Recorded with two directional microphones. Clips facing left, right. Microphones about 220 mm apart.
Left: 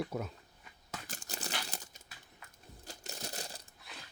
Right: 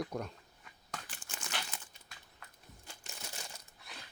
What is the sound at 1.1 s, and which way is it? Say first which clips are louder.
Crumpling: left 4 dB; 40° left (ahead or behind).